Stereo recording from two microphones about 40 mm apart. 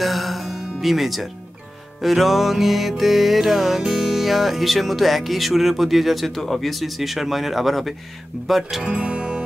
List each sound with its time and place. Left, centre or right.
0.0 s music: centre
8.8 s music: right